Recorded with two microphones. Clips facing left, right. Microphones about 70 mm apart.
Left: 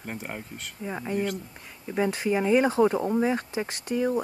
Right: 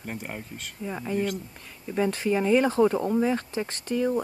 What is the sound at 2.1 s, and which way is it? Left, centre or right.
Speech, centre.